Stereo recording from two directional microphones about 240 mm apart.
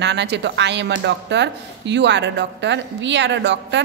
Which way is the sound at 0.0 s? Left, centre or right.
Right.